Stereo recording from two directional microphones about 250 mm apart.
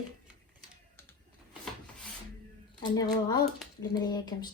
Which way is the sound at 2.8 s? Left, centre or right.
Centre.